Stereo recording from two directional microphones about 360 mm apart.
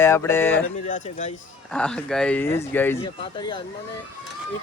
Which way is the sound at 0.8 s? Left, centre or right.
Left.